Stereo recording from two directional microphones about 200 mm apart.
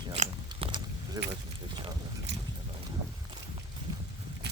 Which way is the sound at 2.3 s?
60° right (ahead or behind).